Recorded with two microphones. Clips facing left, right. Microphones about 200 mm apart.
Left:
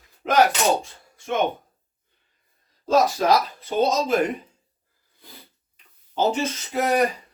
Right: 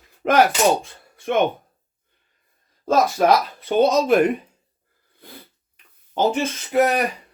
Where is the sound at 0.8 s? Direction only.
60° right (ahead or behind).